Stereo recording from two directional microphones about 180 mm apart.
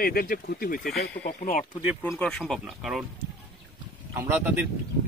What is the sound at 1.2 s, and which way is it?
Speech, 45° left (ahead or behind).